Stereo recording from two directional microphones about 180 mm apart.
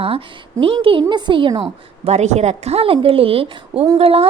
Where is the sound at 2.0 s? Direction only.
40° right (ahead or behind).